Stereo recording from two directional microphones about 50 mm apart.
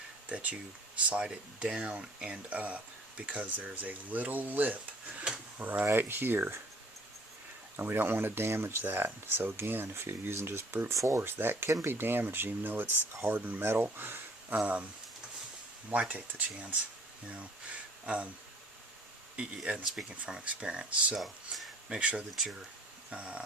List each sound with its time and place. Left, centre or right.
0.3 s speech: right
7.8 s speech: right
10.9 s speech: right
11.2 s speech: right
14.5 s speech: right
15.9 s speech: right
18.0 s speech: right
19.6 s speech: right
21.2 s speech: centre
21.8 s speech: centre